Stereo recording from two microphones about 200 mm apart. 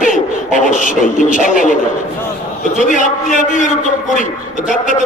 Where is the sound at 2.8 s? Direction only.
40° left (ahead or behind).